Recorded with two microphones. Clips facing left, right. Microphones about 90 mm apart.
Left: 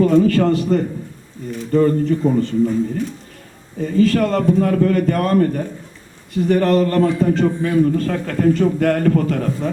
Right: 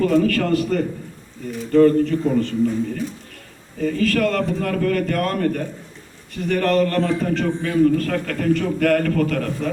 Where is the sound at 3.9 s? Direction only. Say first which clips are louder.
Left 5 dB; 25° left (ahead or behind).